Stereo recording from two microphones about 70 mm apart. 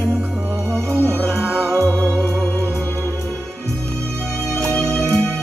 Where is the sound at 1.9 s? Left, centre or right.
Centre.